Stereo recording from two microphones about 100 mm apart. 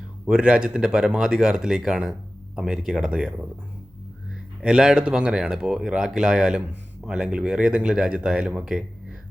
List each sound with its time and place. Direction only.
0.3 s speech: 10° right (ahead or behind)
4.6 s speech: 5° right (ahead or behind)